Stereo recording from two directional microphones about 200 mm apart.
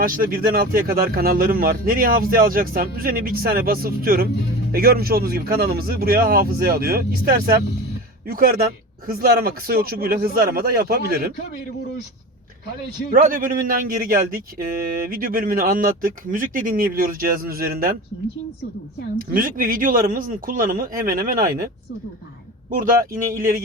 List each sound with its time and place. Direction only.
0.0 s speech: 45° right (ahead or behind)
13.1 s speech: 40° right (ahead or behind)
19.3 s speech: 45° right (ahead or behind)
22.7 s speech: 40° right (ahead or behind)